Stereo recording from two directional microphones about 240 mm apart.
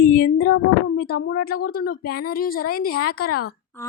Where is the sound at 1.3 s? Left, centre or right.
Left.